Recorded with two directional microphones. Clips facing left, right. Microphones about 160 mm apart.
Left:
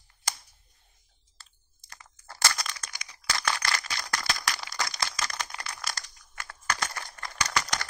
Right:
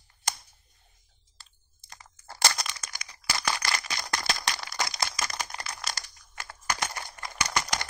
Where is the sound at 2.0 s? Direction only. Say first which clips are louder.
Right 3 dB; 25° right (ahead or behind).